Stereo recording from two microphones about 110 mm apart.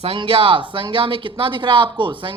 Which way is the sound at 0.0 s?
55° right (ahead or behind).